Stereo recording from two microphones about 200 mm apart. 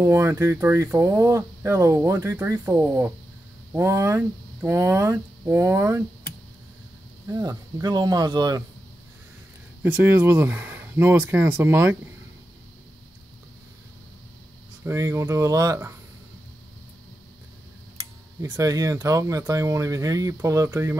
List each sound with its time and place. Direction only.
0.0 s speech: 15° right (ahead or behind)
7.2 s speech: 20° right (ahead or behind)
9.8 s speech: 10° right (ahead or behind)
14.9 s speech: 15° right (ahead or behind)
17.9 s speech: 15° right (ahead or behind)